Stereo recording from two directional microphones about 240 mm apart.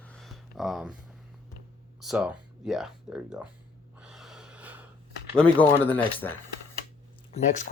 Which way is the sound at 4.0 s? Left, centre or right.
Centre.